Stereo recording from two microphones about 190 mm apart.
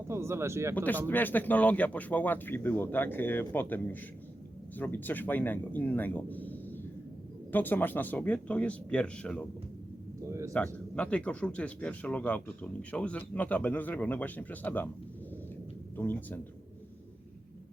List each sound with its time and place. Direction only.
0.1 s speech: 15° right (ahead or behind)
1.0 s speech: 10° left (ahead or behind)
10.2 s a sound: 15° right (ahead or behind)
10.9 s speech: 5° left (ahead or behind)
16.0 s speech: 10° left (ahead or behind)